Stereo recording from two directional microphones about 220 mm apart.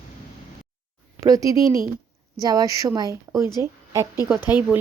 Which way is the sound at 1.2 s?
15° right (ahead or behind).